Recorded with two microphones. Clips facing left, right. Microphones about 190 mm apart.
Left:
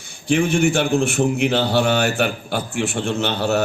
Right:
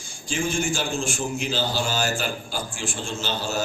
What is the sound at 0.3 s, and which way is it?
A man's voice, 60° left (ahead or behind).